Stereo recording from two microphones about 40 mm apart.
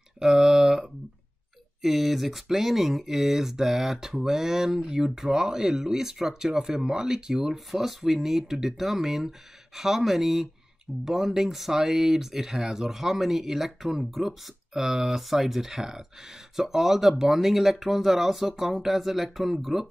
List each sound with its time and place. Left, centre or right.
0.2 s a sound: centre
1.8 s speech: centre
7.5 s speech: centre